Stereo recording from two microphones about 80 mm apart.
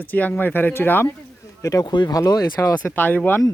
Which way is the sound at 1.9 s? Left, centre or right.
Left.